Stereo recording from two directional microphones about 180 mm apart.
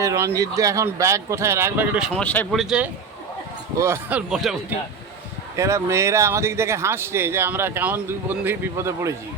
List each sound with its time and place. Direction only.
0.0 s speech: 15° right (ahead or behind)
2.2 s speech: 10° left (ahead or behind)
2.6 s a man's voice: 5° right (ahead or behind)
3.8 s speech: 15° right (ahead or behind)
4.3 s a man's voice: centre (ahead or behind)
5.5 s speech: 15° right (ahead or behind)